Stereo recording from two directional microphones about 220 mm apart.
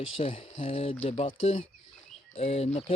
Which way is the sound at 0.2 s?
25° left (ahead or behind).